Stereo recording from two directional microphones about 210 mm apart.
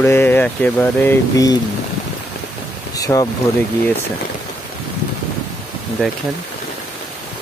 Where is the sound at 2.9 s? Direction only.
15° left (ahead or behind).